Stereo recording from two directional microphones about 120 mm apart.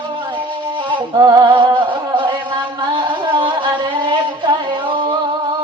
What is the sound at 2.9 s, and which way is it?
Music, 40° right (ahead or behind).